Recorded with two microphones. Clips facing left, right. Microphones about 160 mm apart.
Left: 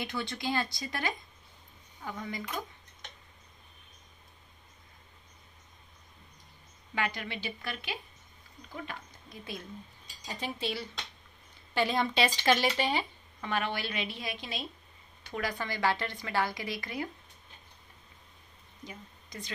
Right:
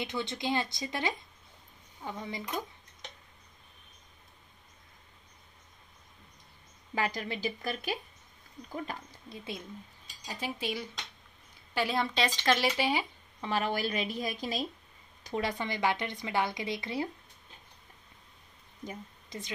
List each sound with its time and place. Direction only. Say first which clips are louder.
0.0 s a woman's voice: right 1 dB; 20° right (ahead or behind)
7.0 s a woman's voice: right 2 dB; 35° right (ahead or behind)
10.2 s speech: even; 5° right (ahead or behind)
13.4 s a woman's voice: right 2 dB; 35° right (ahead or behind)
15.3 s a woman's voice: right 2 dB; 25° right (ahead or behind)
19.2 s a sound: right 1 dB; 25° right (ahead or behind)